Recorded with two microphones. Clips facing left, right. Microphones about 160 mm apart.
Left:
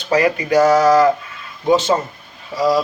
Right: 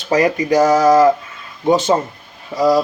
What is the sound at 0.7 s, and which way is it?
Speech, 25° right (ahead or behind).